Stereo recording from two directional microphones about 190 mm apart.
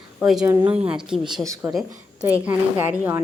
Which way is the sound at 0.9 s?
5° right (ahead or behind).